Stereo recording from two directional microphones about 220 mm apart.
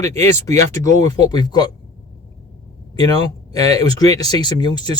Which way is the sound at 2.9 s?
20° left (ahead or behind).